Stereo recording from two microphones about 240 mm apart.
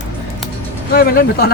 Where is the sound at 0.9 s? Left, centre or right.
Left.